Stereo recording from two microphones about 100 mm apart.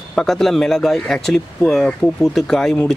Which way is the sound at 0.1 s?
5° left (ahead or behind).